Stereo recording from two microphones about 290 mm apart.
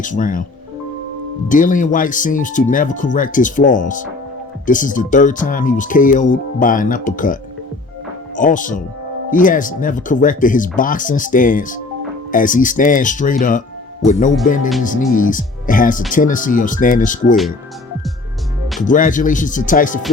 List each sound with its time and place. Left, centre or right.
0.0 s speech: left
1.5 s speech: left
8.4 s speech: left
18.9 s speech: left